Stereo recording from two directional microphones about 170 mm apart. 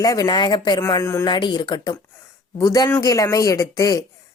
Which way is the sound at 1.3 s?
25° left (ahead or behind).